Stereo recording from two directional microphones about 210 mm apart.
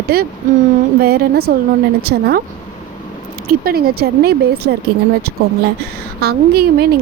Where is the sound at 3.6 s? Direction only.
45° right (ahead or behind).